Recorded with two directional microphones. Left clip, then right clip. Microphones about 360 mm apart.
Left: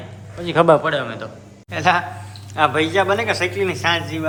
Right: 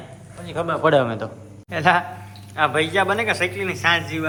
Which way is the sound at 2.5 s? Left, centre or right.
Centre.